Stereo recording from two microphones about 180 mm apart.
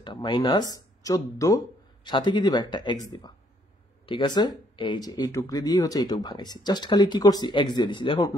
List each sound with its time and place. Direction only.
0.0 s speech: 25° left (ahead or behind)